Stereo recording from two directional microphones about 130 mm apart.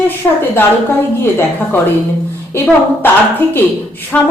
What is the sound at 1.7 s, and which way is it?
Speech, 15° left (ahead or behind).